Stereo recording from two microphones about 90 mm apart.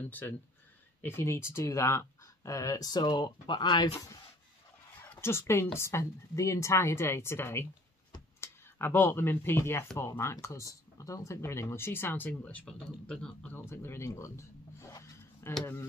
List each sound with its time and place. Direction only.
1.0 s speech: 25° left (ahead or behind); by 3.9 s 55° left (ahead or behind)
5.2 s speech: 30° left (ahead or behind); by 13.5 s 10° left (ahead or behind)
13.5 s speech: 25° left (ahead or behind)
14.9 s a sound: 35° left (ahead or behind)